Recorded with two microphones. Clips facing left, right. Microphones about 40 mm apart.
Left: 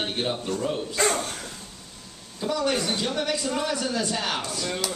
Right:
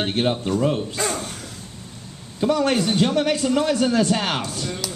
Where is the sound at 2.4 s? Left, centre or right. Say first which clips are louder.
Right 6 dB; right.